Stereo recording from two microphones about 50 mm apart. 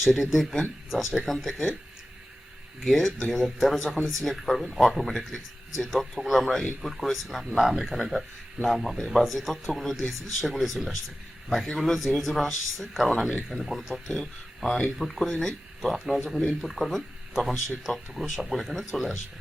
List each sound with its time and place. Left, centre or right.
0.0 s speech: centre
2.8 s speech: centre